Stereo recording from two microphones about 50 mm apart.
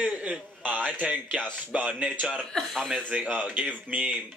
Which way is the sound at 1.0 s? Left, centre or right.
Right.